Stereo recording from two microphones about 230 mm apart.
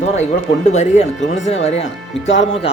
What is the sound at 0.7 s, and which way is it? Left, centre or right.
Speech, left.